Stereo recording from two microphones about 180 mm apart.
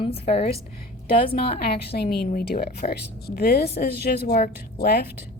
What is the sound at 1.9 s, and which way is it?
Speech, 60° left (ahead or behind).